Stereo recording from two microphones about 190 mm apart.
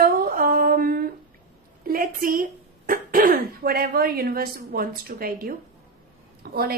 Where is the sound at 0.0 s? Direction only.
50° right (ahead or behind).